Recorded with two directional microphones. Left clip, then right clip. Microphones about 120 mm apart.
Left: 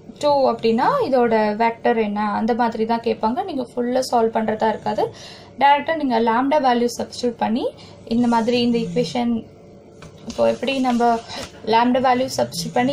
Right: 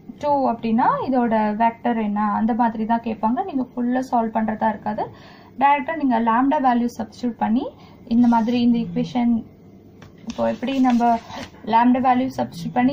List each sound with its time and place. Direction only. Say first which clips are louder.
0.2 s a woman's voice: left 3 dB; 15° right (ahead or behind)
10.4 s a woman's voice: left 2 dB; 20° right (ahead or behind)